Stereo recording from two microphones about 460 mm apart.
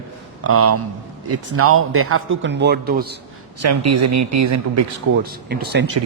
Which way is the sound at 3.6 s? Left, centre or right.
Right.